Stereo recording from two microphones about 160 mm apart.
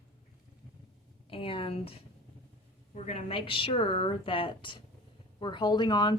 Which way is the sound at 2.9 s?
45° left (ahead or behind).